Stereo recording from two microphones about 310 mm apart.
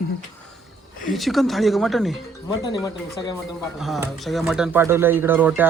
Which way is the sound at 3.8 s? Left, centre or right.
Centre.